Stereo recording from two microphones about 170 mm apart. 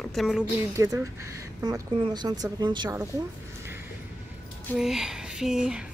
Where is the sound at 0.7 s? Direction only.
20° right (ahead or behind).